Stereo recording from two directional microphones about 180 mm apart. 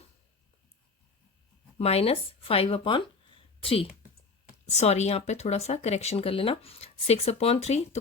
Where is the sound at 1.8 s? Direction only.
35° left (ahead or behind).